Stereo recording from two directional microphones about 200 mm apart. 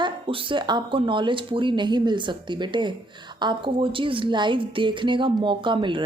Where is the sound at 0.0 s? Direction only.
25° right (ahead or behind).